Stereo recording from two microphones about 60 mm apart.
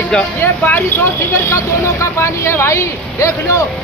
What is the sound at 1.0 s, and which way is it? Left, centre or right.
Speech, left.